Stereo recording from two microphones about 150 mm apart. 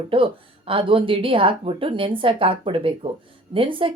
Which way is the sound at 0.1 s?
35° right (ahead or behind).